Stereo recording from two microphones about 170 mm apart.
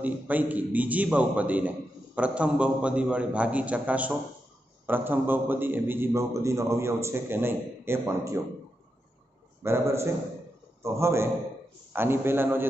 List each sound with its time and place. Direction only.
0.0 s a man's voice: 10° right (ahead or behind)
9.6 s a man's voice: 15° right (ahead or behind)